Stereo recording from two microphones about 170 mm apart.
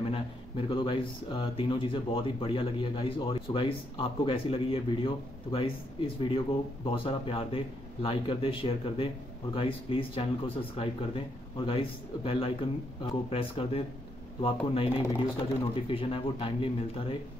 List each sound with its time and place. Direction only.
0.1 s speech: 30° left (ahead or behind)